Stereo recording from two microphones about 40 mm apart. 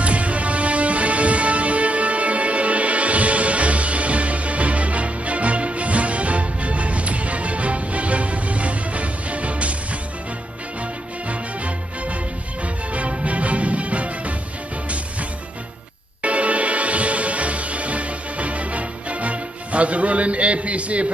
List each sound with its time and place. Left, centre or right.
0.0 s music: right
12.9 s music: right
16.2 s music: right